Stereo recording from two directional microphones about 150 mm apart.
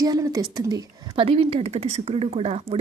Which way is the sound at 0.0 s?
25° right (ahead or behind).